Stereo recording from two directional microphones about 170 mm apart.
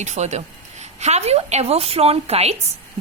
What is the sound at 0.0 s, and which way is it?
A woman's voice, 45° right (ahead or behind).